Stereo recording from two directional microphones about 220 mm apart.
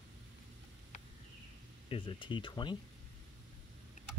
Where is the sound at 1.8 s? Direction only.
25° left (ahead or behind).